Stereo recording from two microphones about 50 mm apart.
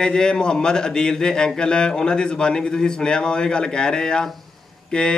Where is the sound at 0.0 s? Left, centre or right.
Centre.